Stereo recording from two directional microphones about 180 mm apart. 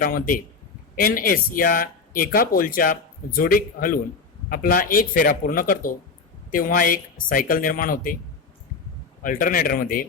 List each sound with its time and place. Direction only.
0.0 s speech: 50° left (ahead or behind)
9.2 s speech: 50° left (ahead or behind)